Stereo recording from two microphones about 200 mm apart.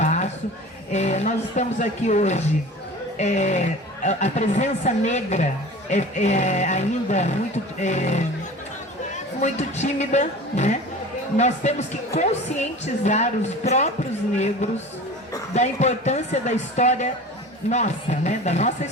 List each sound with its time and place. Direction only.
0.0 s a sound: 35° left (ahead or behind)
0.9 s a woman's voice: 35° left (ahead or behind)
9.4 s a woman's voice: 35° left (ahead or behind)